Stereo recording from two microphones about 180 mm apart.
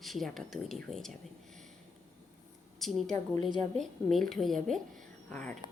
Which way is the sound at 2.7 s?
Centre (ahead or behind).